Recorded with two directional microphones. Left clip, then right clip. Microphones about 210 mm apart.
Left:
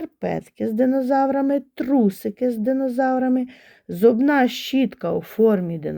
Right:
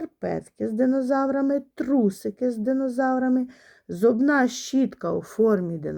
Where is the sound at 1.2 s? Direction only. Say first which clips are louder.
Left 4 dB; 50° left (ahead or behind).